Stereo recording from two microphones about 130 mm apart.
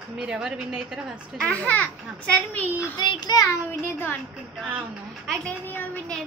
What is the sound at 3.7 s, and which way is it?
Speech, 15° left (ahead or behind).